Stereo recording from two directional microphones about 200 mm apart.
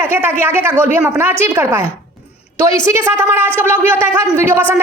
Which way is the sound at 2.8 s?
15° right (ahead or behind).